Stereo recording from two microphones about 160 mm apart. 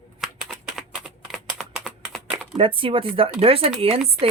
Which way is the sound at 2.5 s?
35° right (ahead or behind).